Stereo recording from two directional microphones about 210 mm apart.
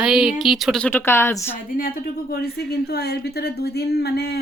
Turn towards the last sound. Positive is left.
turn(degrees=50)  # may be behind; listen again after turning